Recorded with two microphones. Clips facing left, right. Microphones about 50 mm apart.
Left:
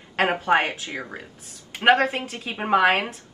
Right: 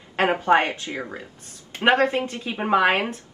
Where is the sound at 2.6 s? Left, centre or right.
Centre.